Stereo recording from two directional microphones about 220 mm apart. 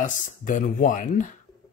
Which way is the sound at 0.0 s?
35° left (ahead or behind).